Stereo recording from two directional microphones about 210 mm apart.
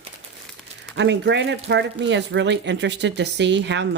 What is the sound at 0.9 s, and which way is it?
A woman's voice, 55° right (ahead or behind).